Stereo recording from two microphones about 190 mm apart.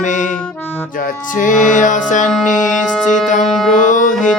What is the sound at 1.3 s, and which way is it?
Music, 45° left (ahead or behind).